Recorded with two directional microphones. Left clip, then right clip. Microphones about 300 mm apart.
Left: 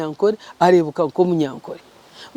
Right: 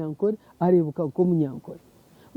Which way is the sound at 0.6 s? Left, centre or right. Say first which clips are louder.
Left 8 dB; centre.